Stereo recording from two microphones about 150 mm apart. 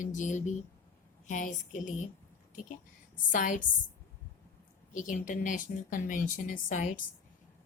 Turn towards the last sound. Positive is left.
turn(degrees=60)  # may be behind; listen again after turning